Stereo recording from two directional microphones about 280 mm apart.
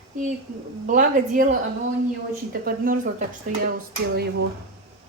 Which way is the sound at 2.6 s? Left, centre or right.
Right.